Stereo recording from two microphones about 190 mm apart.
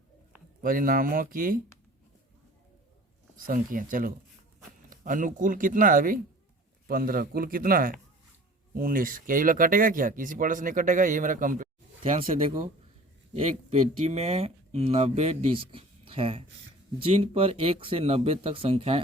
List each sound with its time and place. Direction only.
0.6 s speech: 45° right (ahead or behind)
3.3 s speech: 45° right (ahead or behind)
13.3 s speech: 35° right (ahead or behind)